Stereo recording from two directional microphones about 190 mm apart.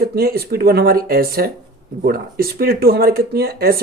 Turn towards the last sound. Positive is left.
turn(degrees=-55)  # may be behind; listen again after turning